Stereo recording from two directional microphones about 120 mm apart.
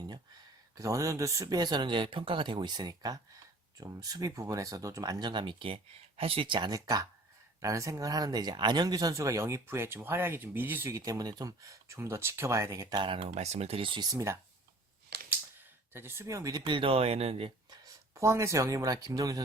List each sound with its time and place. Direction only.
0.8 s speech: 25° right (ahead or behind)
13.0 s speech: 45° right (ahead or behind)
13.3 s speech: 65° right (ahead or behind); by 14.1 s 45° right (ahead or behind)
14.1 s speech: 25° right (ahead or behind)
15.9 s speech: 20° right (ahead or behind); by 17.5 s 55° right (ahead or behind)
17.8 s speech: 25° right (ahead or behind)